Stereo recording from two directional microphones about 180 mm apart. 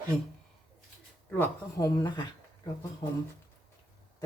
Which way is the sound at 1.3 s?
15° left (ahead or behind).